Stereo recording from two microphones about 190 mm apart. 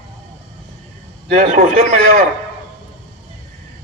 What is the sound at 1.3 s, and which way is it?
Speech, 40° right (ahead or behind).